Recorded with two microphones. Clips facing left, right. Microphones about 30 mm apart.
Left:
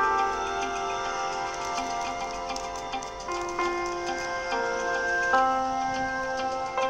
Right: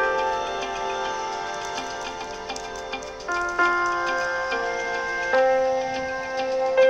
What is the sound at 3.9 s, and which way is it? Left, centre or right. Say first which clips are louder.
Tick-tock: right 6 dB; right.